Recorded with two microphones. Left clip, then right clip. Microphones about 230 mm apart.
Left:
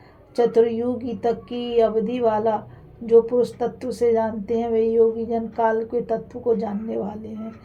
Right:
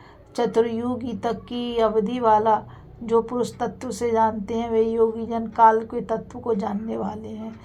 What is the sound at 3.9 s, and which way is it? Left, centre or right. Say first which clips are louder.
Speech: even; right.